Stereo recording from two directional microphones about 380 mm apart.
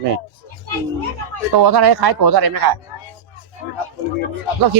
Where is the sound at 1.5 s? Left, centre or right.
Right.